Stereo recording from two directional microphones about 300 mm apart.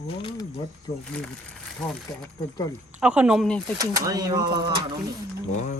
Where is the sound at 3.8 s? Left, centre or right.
Centre.